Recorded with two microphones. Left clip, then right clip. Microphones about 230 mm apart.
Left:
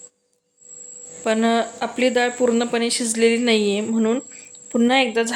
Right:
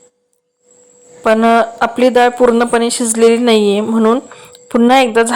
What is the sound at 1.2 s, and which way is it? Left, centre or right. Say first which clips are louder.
Speech: right 10 dB; centre.